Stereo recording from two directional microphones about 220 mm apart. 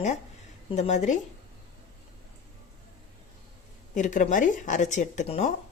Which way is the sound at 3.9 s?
35° left (ahead or behind).